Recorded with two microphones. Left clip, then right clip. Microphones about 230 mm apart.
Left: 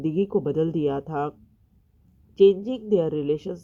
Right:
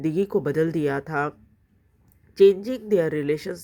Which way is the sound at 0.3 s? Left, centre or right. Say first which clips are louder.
Right 1 dB; right.